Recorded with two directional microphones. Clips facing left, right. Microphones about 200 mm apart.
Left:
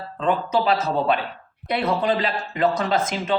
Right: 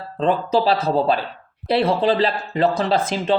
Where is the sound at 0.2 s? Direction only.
35° right (ahead or behind).